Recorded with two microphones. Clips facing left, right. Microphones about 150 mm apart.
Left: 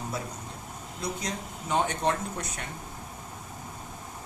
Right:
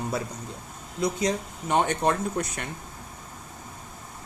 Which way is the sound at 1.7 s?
60° right (ahead or behind).